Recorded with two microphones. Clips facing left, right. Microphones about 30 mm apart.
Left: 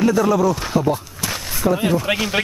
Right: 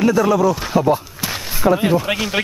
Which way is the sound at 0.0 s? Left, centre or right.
Centre.